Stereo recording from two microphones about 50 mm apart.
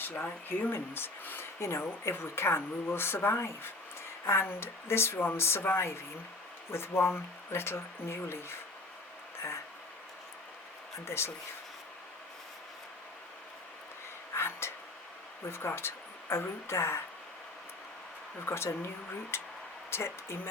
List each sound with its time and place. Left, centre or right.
0.4 s speech: left
1.5 s speech: left
11.0 s speech: left
14.3 s a sound: left
15.4 s speech: left
18.4 s speech: left